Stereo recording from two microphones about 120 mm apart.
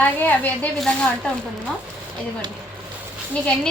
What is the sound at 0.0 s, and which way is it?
Speech, 15° left (ahead or behind).